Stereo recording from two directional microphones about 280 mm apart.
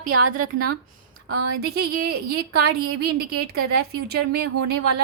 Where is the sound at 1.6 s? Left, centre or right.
Right.